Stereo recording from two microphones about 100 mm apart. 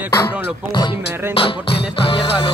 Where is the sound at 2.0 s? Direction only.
65° left (ahead or behind).